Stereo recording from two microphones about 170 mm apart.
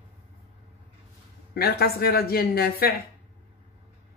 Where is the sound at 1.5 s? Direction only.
65° left (ahead or behind).